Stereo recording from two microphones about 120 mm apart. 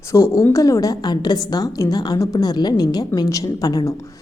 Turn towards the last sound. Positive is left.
turn(degrees=30)  # may be behind; listen again after turning